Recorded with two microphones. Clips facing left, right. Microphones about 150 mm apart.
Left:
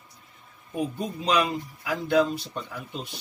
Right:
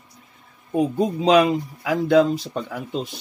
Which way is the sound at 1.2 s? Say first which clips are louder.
Right 8 dB; 85° right.